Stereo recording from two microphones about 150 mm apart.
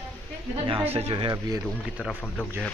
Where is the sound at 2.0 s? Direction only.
5° left (ahead or behind).